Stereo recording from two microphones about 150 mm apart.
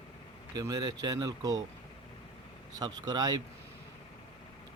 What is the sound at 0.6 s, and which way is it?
Speech, 25° right (ahead or behind).